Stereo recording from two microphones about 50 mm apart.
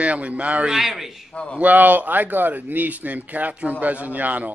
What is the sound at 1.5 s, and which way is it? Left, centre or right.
A man's voice, right.